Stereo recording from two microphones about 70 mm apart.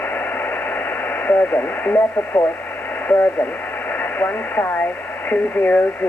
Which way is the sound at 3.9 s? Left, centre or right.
Left.